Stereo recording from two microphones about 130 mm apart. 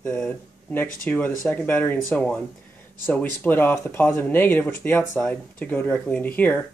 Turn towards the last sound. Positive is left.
turn(degrees=10)  # may be behind; listen again after turning